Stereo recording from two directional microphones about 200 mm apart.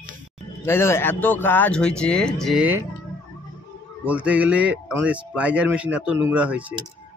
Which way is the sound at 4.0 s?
5° right (ahead or behind).